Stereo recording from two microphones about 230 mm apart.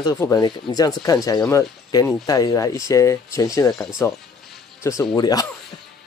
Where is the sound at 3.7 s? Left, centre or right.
Centre.